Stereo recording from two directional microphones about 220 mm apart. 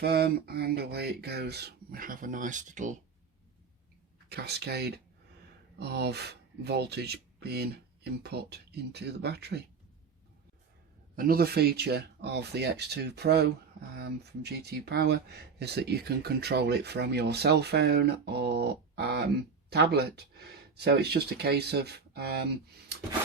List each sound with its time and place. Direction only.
0.0 s speech: 45° right (ahead or behind)
4.3 s speech: 45° right (ahead or behind)
11.2 s speech: 40° right (ahead or behind)